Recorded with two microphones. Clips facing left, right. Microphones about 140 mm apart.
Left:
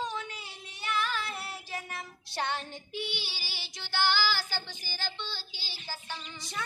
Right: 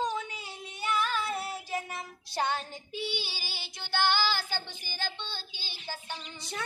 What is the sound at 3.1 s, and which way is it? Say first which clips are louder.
Child singing: right 3 dB; 50° right (ahead or behind).